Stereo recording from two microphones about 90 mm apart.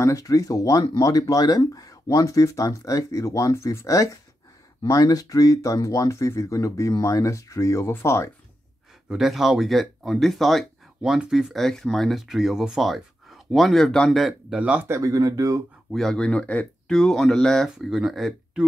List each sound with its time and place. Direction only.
0.0 s speech: 40° left (ahead or behind)
9.1 s speech: 5° right (ahead or behind)
14.5 s speech: 15° right (ahead or behind)
14.9 s speech: 40° right (ahead or behind)
15.9 s speech: 5° left (ahead or behind)